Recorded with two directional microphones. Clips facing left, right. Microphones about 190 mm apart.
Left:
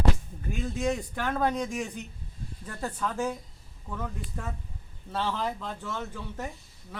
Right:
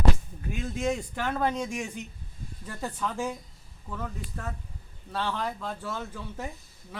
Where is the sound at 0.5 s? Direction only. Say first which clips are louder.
Even; centre (ahead or behind).